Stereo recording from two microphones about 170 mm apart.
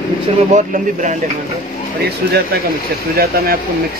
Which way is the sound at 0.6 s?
50° right (ahead or behind).